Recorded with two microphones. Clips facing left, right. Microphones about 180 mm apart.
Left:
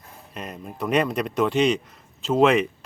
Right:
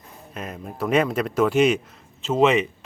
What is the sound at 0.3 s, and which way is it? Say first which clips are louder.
Speech: right 2 dB; centre (ahead or behind).